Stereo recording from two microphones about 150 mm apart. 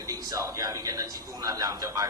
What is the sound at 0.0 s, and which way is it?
A man's voice, 25° right (ahead or behind).